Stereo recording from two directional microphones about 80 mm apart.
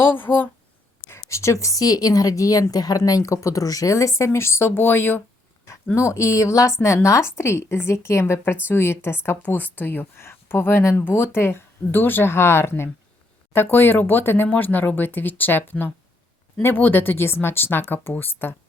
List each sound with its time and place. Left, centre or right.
0.0 s speech: left
1.1 s speech: left
5.6 s speech: left